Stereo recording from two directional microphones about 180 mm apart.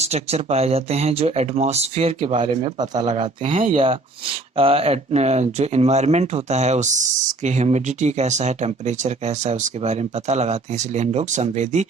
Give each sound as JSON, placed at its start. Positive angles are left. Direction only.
{"t": 0.0, "sound": "speech", "side_deg": -35}
{"t": 2.7, "sound": "speech", "side_deg": -25}
{"t": 3.1, "sound": "speech", "side_deg": -35}